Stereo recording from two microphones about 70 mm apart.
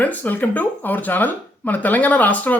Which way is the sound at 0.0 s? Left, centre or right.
Left.